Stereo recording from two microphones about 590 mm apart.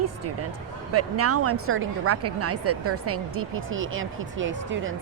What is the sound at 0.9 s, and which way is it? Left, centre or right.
Speech, right.